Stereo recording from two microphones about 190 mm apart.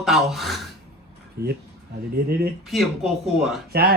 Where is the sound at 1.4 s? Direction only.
55° right (ahead or behind).